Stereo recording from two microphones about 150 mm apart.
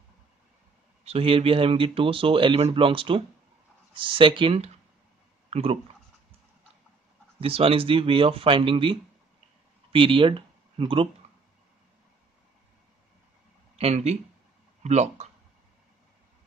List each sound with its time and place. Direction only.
1.0 s speech: 40° right (ahead or behind)
7.3 s speech: 40° right (ahead or behind)
9.9 s speech: 35° right (ahead or behind)
13.7 s speech: 45° right (ahead or behind)